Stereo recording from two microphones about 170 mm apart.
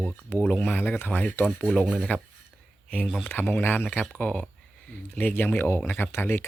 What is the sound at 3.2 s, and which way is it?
Speech, 10° left (ahead or behind).